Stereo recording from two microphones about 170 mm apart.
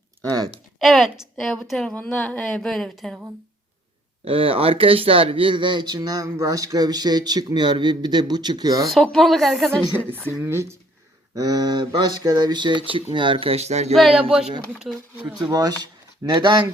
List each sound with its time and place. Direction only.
0.8 s a woman's voice: centre (ahead or behind)
4.3 s speech: 30° right (ahead or behind)
8.9 s a woman's voice: centre (ahead or behind)
10.1 s speech: 10° right (ahead or behind); by 13.9 s 40° right (ahead or behind)
15.5 s speech: 25° right (ahead or behind)